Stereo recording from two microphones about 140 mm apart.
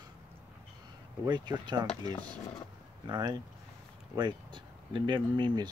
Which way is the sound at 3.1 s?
30° right (ahead or behind).